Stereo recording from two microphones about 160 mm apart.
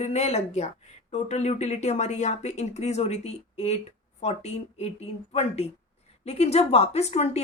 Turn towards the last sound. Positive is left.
turn(degrees=40)  # may be behind; listen again after turning